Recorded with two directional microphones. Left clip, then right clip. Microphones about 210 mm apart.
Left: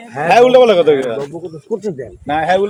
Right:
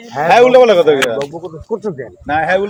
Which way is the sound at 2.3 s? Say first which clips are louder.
Even; 25° right (ahead or behind).